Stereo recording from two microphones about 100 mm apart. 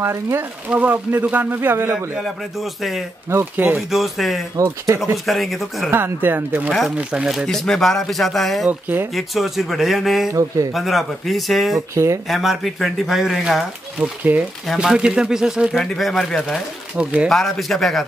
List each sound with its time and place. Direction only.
0.0 s speech: 25° right (ahead or behind)
2.1 s speech: centre (ahead or behind)
3.3 s speech: 20° right (ahead or behind)
3.9 s speech: centre (ahead or behind)
5.9 s speech: 20° right (ahead or behind)
7.0 s speech: 10° right (ahead or behind)
8.6 s speech: 20° right (ahead or behind)
9.1 s speech: centre (ahead or behind)
11.9 s speech: 30° right (ahead or behind)
12.3 s speech: centre (ahead or behind)
16.9 s speech: 10° right (ahead or behind)
17.3 s speech: centre (ahead or behind)